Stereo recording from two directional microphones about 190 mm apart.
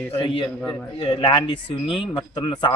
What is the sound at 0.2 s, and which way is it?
Speech, 25° left (ahead or behind).